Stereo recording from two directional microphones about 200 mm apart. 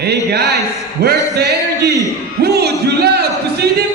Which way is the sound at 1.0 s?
55° right (ahead or behind).